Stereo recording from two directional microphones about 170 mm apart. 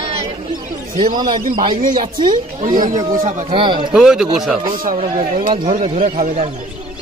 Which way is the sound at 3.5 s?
30° right (ahead or behind).